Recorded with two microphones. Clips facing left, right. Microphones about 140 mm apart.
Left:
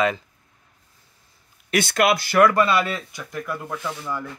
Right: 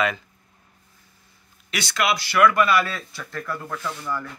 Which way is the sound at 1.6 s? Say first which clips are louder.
Left 5 dB; 50° left (ahead or behind).